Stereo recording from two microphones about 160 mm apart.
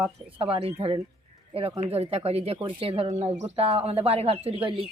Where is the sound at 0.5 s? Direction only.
35° right (ahead or behind).